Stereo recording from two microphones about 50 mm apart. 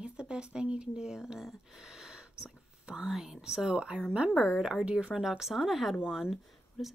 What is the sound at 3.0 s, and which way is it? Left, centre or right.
Speech, centre.